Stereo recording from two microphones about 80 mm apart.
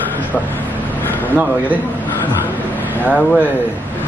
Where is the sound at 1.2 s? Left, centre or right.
Right.